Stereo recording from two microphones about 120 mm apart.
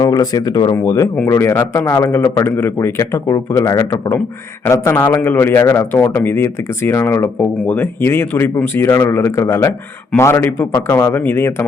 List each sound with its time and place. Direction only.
0.0 s a man's voice: 30° left (ahead or behind)